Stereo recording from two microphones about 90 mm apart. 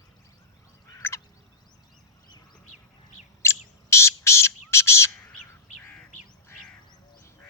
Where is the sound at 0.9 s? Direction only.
30° left (ahead or behind).